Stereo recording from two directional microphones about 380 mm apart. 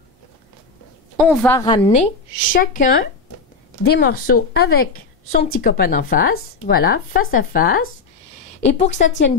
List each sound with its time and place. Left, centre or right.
1.1 s a woman's voice: centre; by 9.3 s left